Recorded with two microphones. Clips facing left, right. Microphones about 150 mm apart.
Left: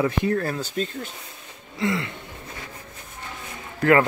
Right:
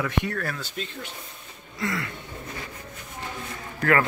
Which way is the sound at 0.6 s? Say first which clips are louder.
Left 7 dB; 40° left (ahead or behind).